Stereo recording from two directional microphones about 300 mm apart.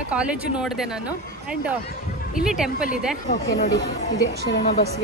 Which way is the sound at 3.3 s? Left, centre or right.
Left.